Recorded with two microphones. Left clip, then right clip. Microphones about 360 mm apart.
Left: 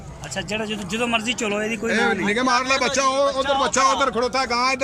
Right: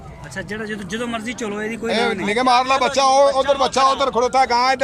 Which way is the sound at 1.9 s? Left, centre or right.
Centre.